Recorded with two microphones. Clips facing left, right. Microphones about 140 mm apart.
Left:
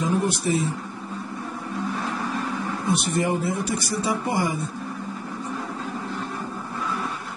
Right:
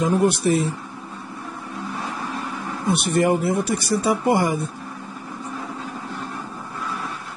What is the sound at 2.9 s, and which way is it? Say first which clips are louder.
Speech: right 5 dB; 65° right (ahead or behind).